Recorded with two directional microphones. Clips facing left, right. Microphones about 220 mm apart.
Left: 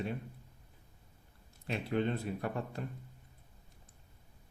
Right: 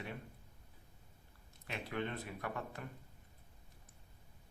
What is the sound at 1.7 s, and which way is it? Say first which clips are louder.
Speech: left 8 dB; 30° left (ahead or behind).